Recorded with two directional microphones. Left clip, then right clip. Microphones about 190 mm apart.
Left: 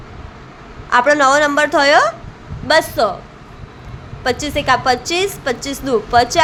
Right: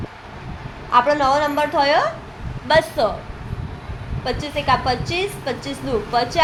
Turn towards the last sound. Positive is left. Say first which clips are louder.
# left 6 dB
turn(degrees=25)  # may be behind; listen again after turning